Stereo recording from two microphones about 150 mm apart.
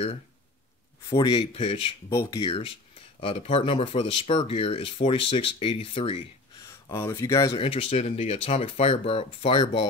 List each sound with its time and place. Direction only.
1.1 s speech: 25° left (ahead or behind)
1.4 s speech: 40° left (ahead or behind)
2.0 s speech: 15° left (ahead or behind)
2.4 s speech: 35° left (ahead or behind)
6.9 s speech: 20° left (ahead or behind)
7.5 s speech: 40° left (ahead or behind)